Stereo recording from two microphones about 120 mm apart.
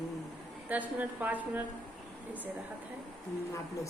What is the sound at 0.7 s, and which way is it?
Speech, 15° right (ahead or behind).